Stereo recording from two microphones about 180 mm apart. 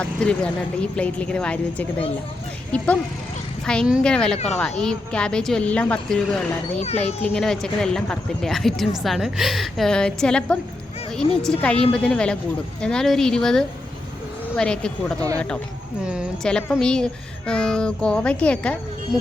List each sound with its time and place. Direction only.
0.0 s speech: 5° left (ahead or behind)
4.4 s speech: 40° left (ahead or behind)
4.8 s speech: 5° left (ahead or behind)
16.0 s speech: centre (ahead or behind)